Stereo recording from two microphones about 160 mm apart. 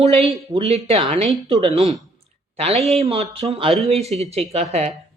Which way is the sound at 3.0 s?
40° right (ahead or behind).